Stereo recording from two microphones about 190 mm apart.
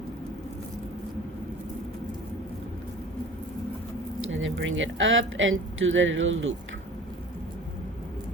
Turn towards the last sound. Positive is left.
turn(degrees=-90)